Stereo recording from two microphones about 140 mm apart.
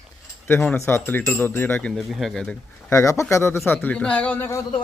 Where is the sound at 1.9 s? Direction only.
Centre (ahead or behind).